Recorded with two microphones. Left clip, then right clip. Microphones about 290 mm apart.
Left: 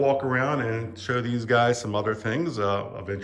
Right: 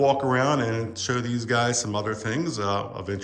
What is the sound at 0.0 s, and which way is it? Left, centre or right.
Speech, centre.